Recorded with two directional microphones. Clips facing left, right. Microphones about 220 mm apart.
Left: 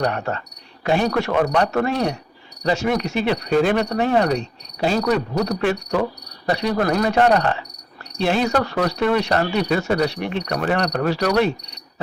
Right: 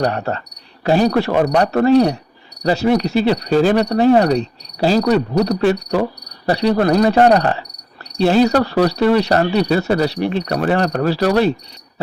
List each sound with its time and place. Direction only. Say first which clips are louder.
0.0 s cricket: right 3 dB; 35° right (ahead or behind)